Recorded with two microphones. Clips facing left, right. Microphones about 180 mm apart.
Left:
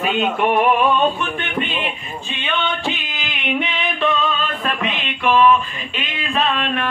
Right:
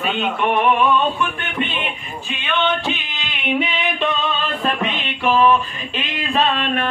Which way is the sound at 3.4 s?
5° right (ahead or behind).